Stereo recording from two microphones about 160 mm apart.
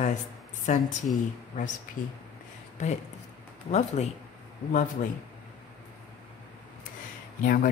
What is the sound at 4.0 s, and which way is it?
Speech, 45° left (ahead or behind).